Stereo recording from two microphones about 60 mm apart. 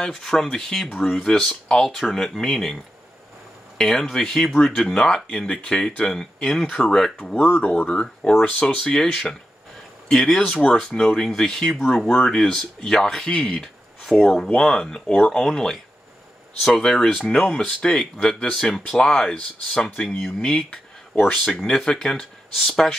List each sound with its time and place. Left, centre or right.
0.0 s speech: centre
0.9 s speech: centre
7.7 s speech: centre
8.4 s speech: left
8.6 s speech: centre